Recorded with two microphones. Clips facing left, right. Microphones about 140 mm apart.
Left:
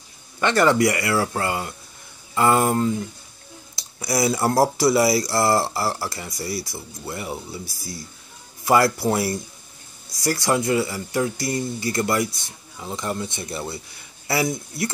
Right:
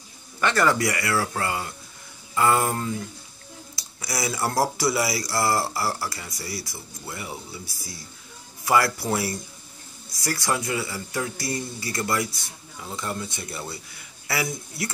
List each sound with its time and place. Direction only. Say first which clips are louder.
0.4 s speech: left 4 dB; 25° left (ahead or behind)
8.6 s speech: left 4 dB; 25° left (ahead or behind)